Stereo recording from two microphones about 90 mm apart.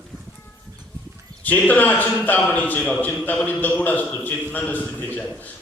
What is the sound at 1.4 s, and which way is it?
A man's voice, 20° left (ahead or behind).